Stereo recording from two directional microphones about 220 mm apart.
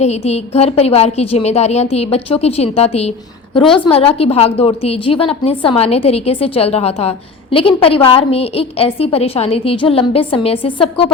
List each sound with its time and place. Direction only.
0.0 s a woman's voice: 30° left (ahead or behind)